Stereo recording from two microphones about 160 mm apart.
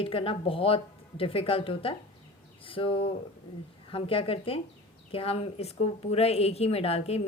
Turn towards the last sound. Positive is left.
turn(degrees=40)  # may be behind; listen again after turning